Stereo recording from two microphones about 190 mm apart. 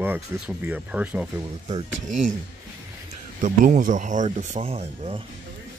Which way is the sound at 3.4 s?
45° right (ahead or behind).